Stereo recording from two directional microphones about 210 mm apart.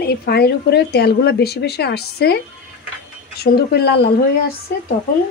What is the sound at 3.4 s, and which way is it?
Speech, 50° left (ahead or behind).